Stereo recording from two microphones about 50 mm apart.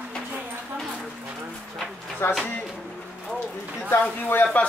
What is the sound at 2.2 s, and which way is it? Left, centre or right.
Speech, left.